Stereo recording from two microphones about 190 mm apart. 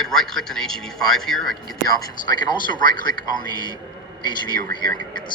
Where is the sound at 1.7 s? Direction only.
20° left (ahead or behind).